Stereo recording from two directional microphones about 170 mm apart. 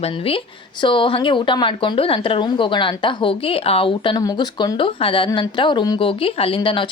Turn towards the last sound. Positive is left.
turn(degrees=30)  # may be behind; listen again after turning